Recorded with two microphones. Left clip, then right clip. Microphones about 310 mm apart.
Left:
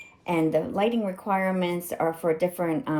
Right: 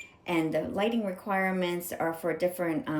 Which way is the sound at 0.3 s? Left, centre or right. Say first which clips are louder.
Left 5 dB; centre.